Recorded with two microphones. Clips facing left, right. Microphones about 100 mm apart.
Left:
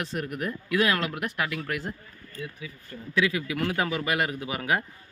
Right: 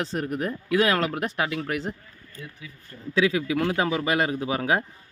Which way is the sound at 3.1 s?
30° right (ahead or behind).